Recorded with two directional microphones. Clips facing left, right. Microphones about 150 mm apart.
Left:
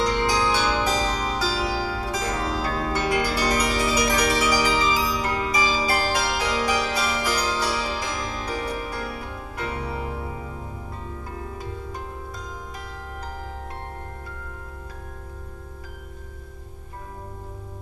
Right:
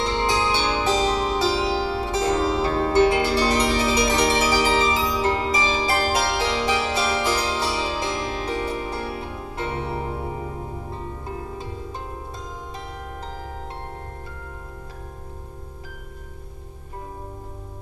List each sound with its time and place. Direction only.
0.0 s music: 25° right (ahead or behind)